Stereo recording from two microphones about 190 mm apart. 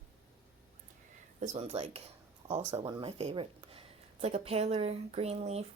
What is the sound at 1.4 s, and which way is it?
Speech, 35° right (ahead or behind).